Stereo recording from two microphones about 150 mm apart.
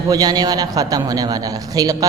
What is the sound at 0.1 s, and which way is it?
A woman's voice, 25° right (ahead or behind).